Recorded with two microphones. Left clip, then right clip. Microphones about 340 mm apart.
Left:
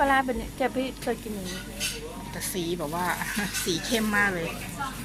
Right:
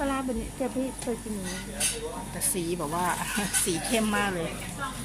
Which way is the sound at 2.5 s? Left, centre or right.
Centre.